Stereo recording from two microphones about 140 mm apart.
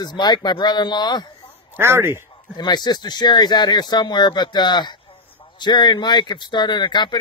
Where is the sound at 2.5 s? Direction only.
30° left (ahead or behind).